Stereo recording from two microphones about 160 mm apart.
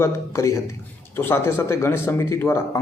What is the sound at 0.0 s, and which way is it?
Speech, 20° left (ahead or behind).